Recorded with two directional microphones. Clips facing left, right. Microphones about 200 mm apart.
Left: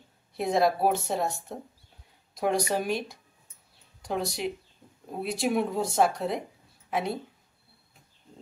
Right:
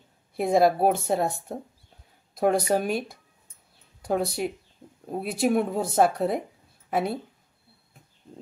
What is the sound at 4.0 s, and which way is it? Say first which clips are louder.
Speech: right 5 dB; 55° right (ahead or behind).